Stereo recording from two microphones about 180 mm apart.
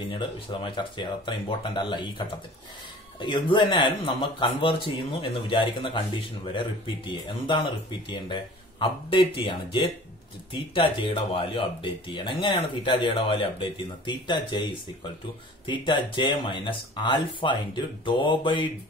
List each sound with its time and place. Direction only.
0.1 s speech: 30° left (ahead or behind)